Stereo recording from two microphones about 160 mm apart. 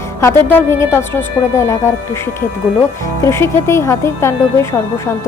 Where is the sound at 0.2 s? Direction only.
15° left (ahead or behind).